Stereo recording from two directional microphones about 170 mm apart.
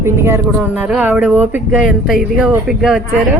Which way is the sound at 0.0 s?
15° right (ahead or behind).